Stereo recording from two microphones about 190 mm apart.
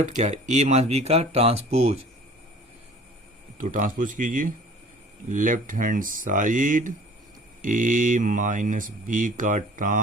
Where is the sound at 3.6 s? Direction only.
45° right (ahead or behind).